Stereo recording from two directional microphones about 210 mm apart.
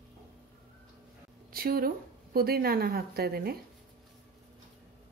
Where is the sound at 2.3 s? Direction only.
45° right (ahead or behind).